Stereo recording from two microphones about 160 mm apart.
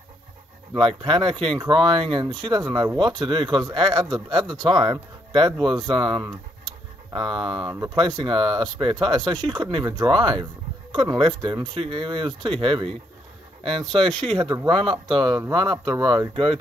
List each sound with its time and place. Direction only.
0.7 s speech: 30° right (ahead or behind)
14.4 s speech: 25° right (ahead or behind)